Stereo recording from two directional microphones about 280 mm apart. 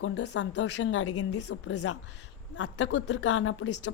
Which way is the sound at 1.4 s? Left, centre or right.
Left.